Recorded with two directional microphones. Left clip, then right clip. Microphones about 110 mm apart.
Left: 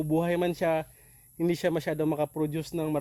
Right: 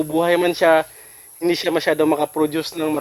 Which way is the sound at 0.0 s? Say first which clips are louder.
Right 10 dB; 20° left (ahead or behind).